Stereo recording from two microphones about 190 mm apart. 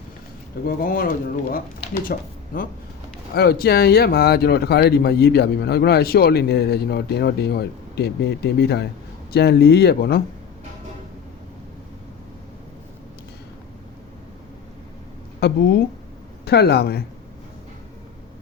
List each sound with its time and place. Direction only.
0.8 s speech: 50° left (ahead or behind)
15.4 s speech: 55° left (ahead or behind)